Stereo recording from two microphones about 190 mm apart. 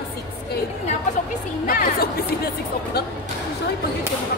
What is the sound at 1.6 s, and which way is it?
Speech, 50° left (ahead or behind).